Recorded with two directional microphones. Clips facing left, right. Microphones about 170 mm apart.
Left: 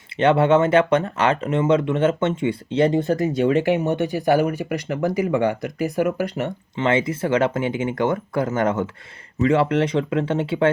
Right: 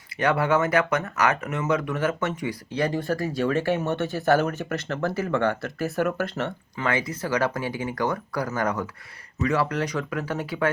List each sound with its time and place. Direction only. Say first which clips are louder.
0.2 s speech: left 6 dB; 25° left (ahead or behind)
6.7 s speech: left 7 dB; 25° left (ahead or behind)